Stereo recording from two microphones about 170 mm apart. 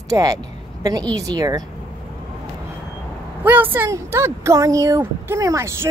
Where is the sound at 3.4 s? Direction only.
10° right (ahead or behind).